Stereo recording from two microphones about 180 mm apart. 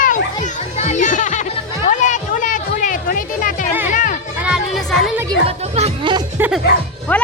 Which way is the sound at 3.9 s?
45° left (ahead or behind).